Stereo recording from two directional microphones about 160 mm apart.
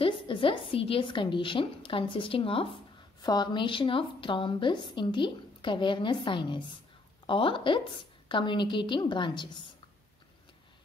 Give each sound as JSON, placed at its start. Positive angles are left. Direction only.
{"t": 0.0, "sound": "a woman's voice", "side_deg": 35}